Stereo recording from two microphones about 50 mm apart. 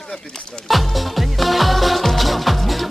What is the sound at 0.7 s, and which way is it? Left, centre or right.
Music, centre.